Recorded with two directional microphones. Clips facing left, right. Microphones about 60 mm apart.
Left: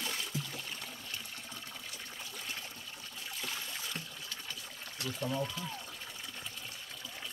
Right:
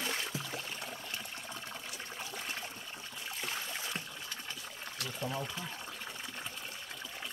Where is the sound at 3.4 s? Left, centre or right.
Right.